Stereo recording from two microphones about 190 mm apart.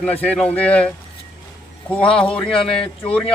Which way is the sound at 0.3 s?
5° left (ahead or behind).